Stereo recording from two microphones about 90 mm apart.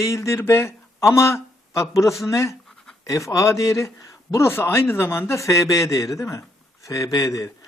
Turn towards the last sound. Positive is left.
turn(degrees=40)  # may be behind; listen again after turning